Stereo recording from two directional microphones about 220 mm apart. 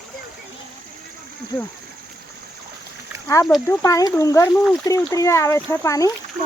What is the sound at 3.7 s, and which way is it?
Speech, 15° left (ahead or behind).